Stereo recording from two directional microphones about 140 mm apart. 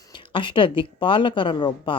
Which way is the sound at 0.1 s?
35° left (ahead or behind).